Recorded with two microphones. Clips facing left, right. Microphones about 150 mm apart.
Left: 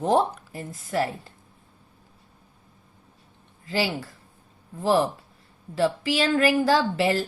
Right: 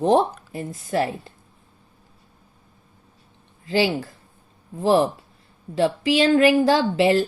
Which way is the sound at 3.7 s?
25° right (ahead or behind).